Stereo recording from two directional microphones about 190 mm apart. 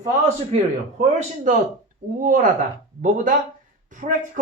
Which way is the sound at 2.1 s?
45° right (ahead or behind).